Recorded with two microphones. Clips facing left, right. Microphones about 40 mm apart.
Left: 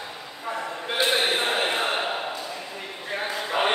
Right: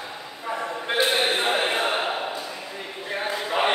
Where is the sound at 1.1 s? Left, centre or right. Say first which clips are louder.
Right 1 dB; centre.